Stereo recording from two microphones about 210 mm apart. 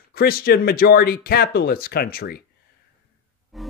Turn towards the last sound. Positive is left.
turn(degrees=0)  # may be behind; listen again after turning